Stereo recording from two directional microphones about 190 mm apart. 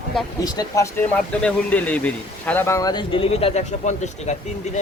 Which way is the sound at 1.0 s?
5° left (ahead or behind).